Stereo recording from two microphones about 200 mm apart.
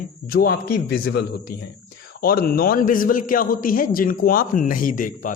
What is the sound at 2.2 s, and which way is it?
Speech, 45° left (ahead or behind).